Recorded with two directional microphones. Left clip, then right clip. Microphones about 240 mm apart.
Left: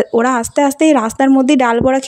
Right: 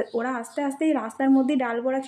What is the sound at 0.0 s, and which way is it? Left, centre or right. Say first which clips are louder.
Speech: left 14 dB; left.